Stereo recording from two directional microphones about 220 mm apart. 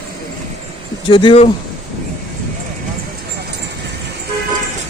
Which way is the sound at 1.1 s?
20° left (ahead or behind).